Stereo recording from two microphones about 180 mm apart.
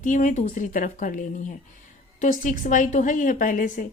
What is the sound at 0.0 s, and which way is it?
A woman's voice, 45° left (ahead or behind).